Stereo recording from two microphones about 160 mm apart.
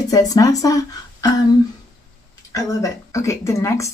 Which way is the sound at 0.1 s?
20° left (ahead or behind).